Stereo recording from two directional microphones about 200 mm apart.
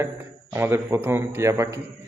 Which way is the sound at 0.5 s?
10° right (ahead or behind).